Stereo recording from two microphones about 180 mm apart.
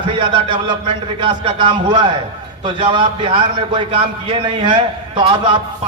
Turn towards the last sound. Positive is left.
turn(degrees=-30)  # may be behind; listen again after turning